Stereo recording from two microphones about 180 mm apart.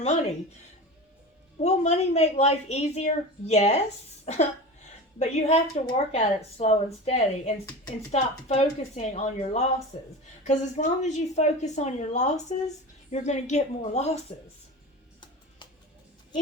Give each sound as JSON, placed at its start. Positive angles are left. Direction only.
{"t": 1.5, "sound": "a woman's voice", "side_deg": 40}